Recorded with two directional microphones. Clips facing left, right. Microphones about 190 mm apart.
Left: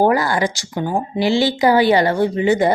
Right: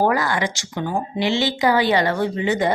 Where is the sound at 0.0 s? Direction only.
30° left (ahead or behind).